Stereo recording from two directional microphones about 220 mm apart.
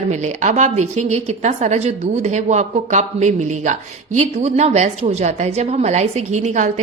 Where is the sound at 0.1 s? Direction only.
30° right (ahead or behind).